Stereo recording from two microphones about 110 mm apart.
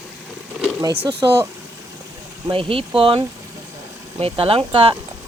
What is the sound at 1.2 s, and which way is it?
Speech, 30° right (ahead or behind).